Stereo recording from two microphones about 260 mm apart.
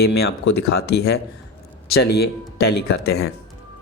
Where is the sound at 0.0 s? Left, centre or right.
Left.